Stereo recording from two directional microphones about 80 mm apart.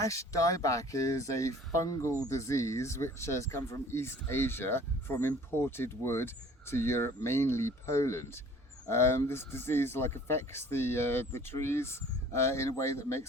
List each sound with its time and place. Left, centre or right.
0.0 s speech: left